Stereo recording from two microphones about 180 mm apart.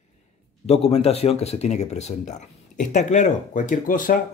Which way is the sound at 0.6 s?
35° left (ahead or behind).